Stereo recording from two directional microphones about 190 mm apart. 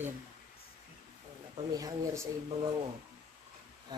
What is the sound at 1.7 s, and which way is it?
Speech, 15° right (ahead or behind).